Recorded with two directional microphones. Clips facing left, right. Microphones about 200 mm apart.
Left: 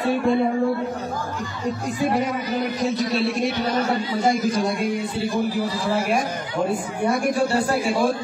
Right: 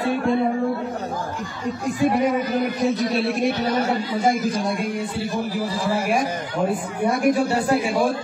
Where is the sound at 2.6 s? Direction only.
60° right (ahead or behind).